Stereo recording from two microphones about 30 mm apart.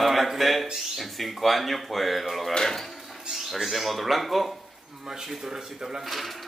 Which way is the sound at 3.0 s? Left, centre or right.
Centre.